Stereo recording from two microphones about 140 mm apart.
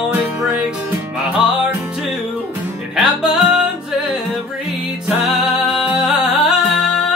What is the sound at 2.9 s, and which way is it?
Music, 5° right (ahead or behind).